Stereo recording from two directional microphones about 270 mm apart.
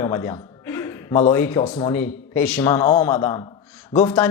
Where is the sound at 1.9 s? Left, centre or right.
Centre.